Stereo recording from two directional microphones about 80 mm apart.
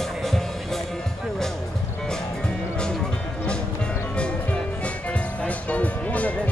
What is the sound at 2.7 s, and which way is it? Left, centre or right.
Music, centre.